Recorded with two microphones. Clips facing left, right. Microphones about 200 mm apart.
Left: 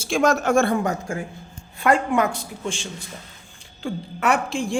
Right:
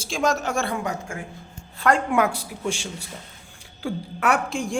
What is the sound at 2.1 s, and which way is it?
Speech, 10° right (ahead or behind).